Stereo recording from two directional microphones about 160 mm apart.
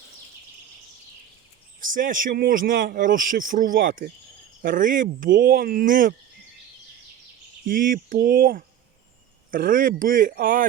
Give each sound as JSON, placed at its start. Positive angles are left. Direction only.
{"t": 1.8, "sound": "speech", "side_deg": -55}
{"t": 7.6, "sound": "speech", "side_deg": -60}